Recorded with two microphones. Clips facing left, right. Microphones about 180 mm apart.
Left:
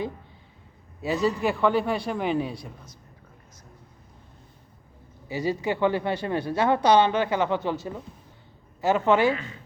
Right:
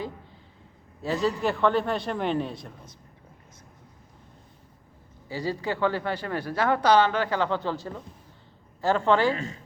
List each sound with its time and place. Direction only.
1.1 s a man's voice: centre (ahead or behind)
5.3 s a woman's voice: 20° left (ahead or behind)
9.3 s a woman's voice: 40° right (ahead or behind)